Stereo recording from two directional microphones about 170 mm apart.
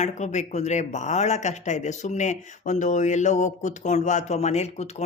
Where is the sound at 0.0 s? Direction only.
45° left (ahead or behind).